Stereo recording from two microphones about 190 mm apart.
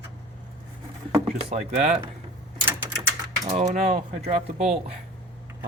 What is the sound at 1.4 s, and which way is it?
Speech, 35° right (ahead or behind).